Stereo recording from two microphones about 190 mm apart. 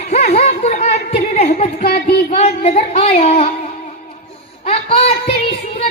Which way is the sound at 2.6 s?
35° left (ahead or behind).